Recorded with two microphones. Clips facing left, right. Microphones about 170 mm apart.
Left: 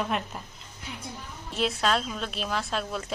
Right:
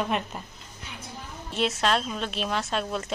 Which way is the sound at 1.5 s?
Centre (ahead or behind).